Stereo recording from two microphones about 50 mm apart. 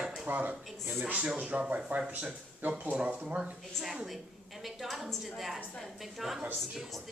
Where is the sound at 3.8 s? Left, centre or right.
Centre.